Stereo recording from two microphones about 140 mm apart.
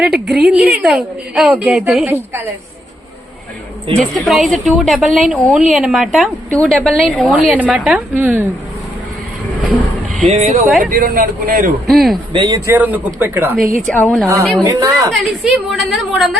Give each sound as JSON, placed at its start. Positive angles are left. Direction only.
{"t": 0.0, "sound": "a woman's voice", "side_deg": 0}
{"t": 2.0, "sound": "a woman's voice", "side_deg": -15}
{"t": 3.9, "sound": "a woman's voice", "side_deg": 0}
{"t": 10.2, "sound": "speech", "side_deg": -60}
{"t": 10.8, "sound": "a man's voice", "side_deg": -80}
{"t": 11.9, "sound": "a woman's voice", "side_deg": 0}
{"t": 12.3, "sound": "a woman's voice", "side_deg": -30}
{"t": 12.7, "sound": "a woman's voice", "side_deg": -10}
{"t": 13.8, "sound": "a woman's voice", "side_deg": 10}
{"t": 14.6, "sound": "a woman's voice", "side_deg": -20}
{"t": 15.1, "sound": "a woman's voice", "side_deg": 0}